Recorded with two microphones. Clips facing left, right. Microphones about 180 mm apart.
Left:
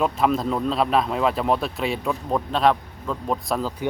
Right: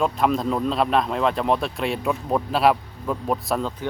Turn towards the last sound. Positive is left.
turn(degrees=-5)  # may be behind; listen again after turning